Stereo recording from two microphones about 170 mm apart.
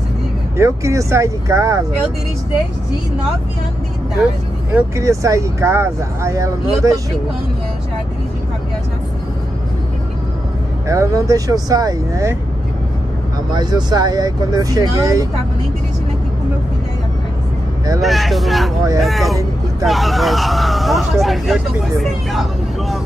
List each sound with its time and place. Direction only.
0.6 s speech: 15° right (ahead or behind)
4.6 s speech: 15° right (ahead or behind)
10.9 s speech: 20° right (ahead or behind)
13.5 s speech: 25° right (ahead or behind)
18.0 s speech: centre (ahead or behind)